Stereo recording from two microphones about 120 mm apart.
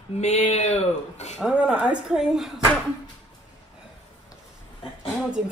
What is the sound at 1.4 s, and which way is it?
A woman's voice, 10° right (ahead or behind).